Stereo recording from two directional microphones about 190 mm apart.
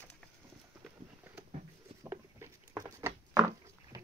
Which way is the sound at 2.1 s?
15° right (ahead or behind).